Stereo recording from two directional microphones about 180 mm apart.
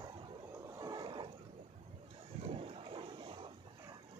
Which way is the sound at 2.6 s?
30° right (ahead or behind).